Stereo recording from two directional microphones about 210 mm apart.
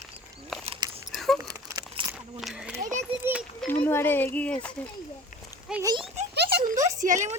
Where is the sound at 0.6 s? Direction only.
25° right (ahead or behind).